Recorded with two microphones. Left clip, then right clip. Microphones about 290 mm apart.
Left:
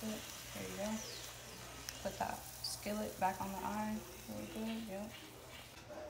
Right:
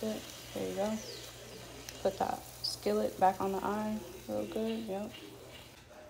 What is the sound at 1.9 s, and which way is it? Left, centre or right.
Speech, centre.